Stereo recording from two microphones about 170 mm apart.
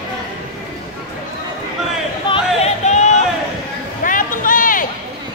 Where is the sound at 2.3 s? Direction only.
40° left (ahead or behind).